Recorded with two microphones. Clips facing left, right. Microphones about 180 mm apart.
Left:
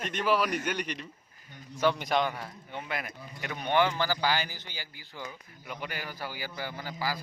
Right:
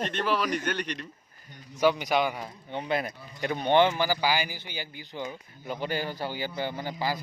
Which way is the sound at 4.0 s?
10° right (ahead or behind).